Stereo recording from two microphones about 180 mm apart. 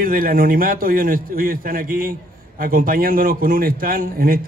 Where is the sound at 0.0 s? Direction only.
50° right (ahead or behind).